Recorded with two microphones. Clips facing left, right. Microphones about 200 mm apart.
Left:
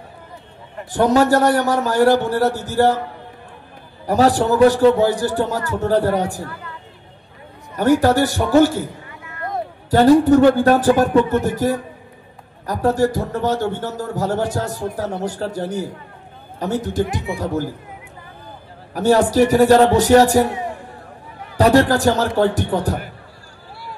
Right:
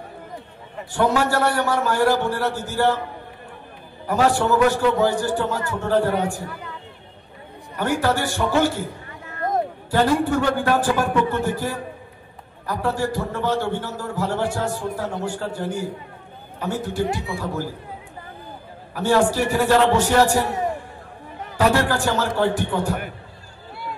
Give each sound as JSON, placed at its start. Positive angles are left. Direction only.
{"t": 0.9, "sound": "a man's voice", "side_deg": 40}
{"t": 4.0, "sound": "a man's voice", "side_deg": 40}
{"t": 7.7, "sound": "a man's voice", "side_deg": 40}
{"t": 9.3, "sound": "a sound", "side_deg": -40}
{"t": 9.8, "sound": "a man's voice", "side_deg": 40}
{"t": 18.9, "sound": "a man's voice", "side_deg": 40}
{"t": 21.5, "sound": "a man's voice", "side_deg": 40}